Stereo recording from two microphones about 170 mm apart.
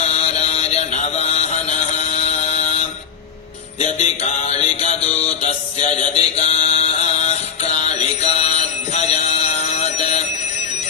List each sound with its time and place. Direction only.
0.0 s music: 35° left (ahead or behind)
4.0 s music: 35° left (ahead or behind)
5.4 s mantra: 40° left (ahead or behind)